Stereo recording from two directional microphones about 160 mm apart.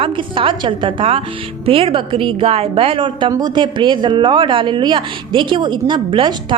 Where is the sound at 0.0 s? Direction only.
35° right (ahead or behind).